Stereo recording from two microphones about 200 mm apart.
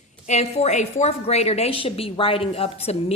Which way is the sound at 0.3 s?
35° left (ahead or behind).